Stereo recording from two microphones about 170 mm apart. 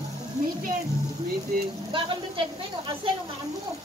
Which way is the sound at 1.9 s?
30° right (ahead or behind).